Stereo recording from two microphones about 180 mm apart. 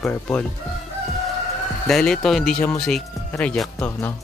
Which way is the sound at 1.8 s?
5° left (ahead or behind).